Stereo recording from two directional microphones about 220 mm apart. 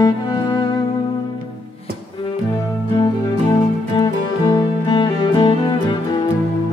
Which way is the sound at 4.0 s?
20° left (ahead or behind).